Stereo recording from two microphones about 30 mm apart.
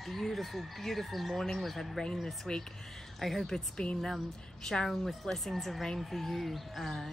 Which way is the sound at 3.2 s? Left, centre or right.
Centre.